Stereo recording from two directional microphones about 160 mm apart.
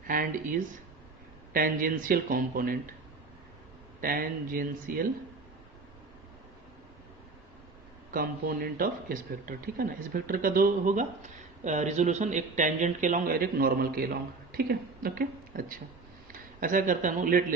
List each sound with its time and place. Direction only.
0.1 s speech: 60° right (ahead or behind)
4.0 s speech: 65° right (ahead or behind)
8.1 s speech: 65° right (ahead or behind)